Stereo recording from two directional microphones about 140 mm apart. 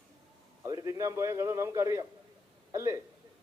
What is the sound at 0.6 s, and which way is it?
A man's voice, 25° right (ahead or behind).